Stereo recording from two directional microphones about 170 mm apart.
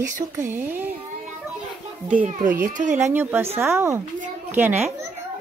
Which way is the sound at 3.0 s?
10° right (ahead or behind).